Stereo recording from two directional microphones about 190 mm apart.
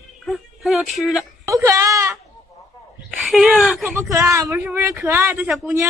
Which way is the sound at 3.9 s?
15° right (ahead or behind).